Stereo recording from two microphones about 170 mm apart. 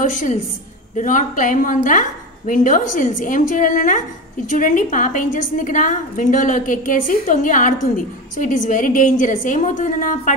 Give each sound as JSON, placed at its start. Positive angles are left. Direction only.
{"t": 0.0, "sound": "a woman's voice", "side_deg": 50}